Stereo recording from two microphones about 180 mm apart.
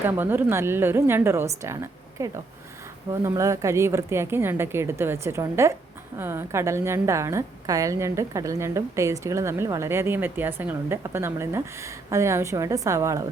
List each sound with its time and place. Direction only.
0.0 s a woman's voice: 10° right (ahead or behind)